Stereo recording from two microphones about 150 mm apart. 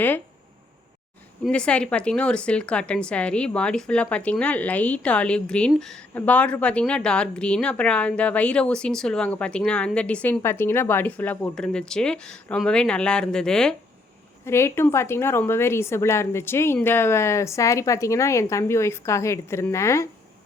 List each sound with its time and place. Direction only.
1.5 s speech: 5° left (ahead or behind)
14.4 s speech: 15° left (ahead or behind)